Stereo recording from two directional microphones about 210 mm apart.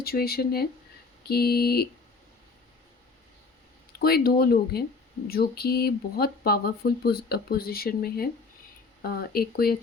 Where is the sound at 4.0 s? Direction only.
45° left (ahead or behind).